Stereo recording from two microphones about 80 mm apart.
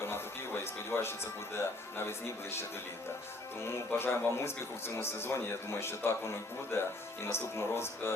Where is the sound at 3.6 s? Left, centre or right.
Left.